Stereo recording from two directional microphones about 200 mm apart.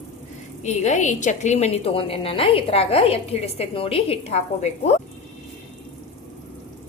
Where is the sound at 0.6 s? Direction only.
35° left (ahead or behind).